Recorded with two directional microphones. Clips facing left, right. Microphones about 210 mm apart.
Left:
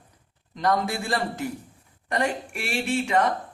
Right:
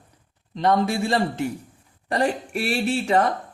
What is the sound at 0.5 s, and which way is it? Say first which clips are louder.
A man's voice: right 4 dB; 25° right (ahead or behind).